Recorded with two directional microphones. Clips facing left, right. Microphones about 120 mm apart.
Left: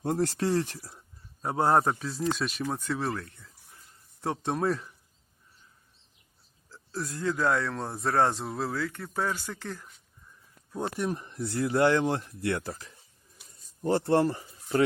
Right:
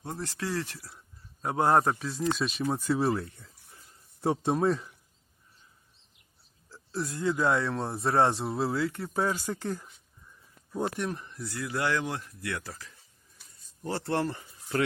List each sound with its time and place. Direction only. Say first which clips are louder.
0.0 s speech: left 10 dB; 50° left (ahead or behind)
0.3 s speech: left 6 dB; 35° left (ahead or behind)
1.4 s a man's voice: even; centre (ahead or behind)
6.9 s speech: right 1 dB; 15° right (ahead or behind)
8.3 s speech: right 2 dB; 10° right (ahead or behind)
8.6 s speech: right 3 dB; 20° right (ahead or behind)
10.7 s speech: right 1 dB; centre (ahead or behind)
11.1 s speech: left 5 dB; 30° left (ahead or behind)
13.5 s a sound: left 7 dB; 30° left (ahead or behind)
14.1 s speech: left 3 dB; 30° left (ahead or behind)